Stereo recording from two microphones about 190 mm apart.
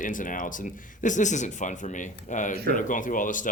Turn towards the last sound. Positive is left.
turn(degrees=45)  # may be behind; listen again after turning